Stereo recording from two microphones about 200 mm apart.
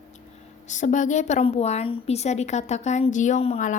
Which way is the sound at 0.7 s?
40° left (ahead or behind).